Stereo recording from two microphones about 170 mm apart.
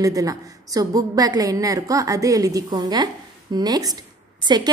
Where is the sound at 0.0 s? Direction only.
20° right (ahead or behind).